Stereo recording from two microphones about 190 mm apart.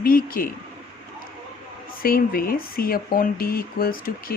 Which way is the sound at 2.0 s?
50° left (ahead or behind).